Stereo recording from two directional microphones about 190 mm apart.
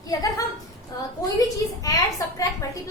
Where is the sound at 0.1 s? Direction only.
20° left (ahead or behind).